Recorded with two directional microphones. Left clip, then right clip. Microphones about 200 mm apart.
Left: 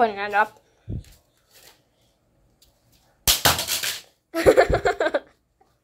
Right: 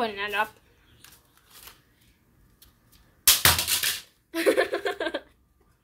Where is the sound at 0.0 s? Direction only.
15° right (ahead or behind).